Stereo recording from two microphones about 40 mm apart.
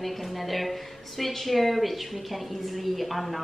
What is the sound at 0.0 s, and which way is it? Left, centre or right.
A woman's voice, centre.